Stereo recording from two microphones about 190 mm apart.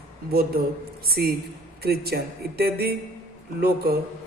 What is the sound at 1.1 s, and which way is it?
A man's voice, 55° right (ahead or behind).